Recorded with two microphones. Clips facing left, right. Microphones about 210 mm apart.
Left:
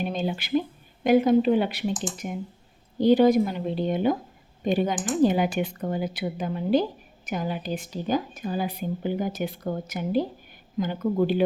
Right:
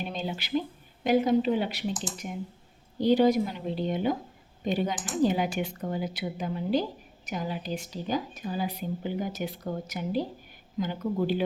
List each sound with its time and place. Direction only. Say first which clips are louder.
0.1 s speech: left 5 dB; 50° left (ahead or behind)